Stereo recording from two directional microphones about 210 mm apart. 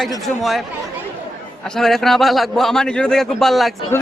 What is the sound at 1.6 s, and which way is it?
Speech, 5° left (ahead or behind).